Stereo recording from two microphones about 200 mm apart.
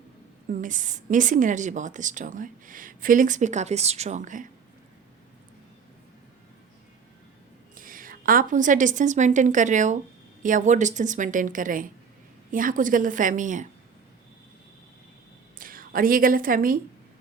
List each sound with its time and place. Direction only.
0.4 s a woman's voice: 40° right (ahead or behind)
7.8 s a woman's voice: 45° right (ahead or behind)
15.5 s a woman's voice: 45° right (ahead or behind)